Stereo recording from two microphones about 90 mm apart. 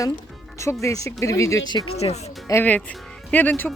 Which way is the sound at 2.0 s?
90° left.